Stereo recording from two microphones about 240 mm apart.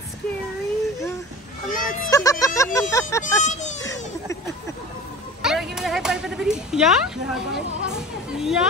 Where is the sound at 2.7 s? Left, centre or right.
Centre.